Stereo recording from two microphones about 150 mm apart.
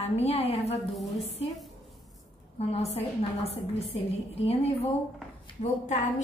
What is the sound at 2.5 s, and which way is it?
A woman's voice, 40° left (ahead or behind).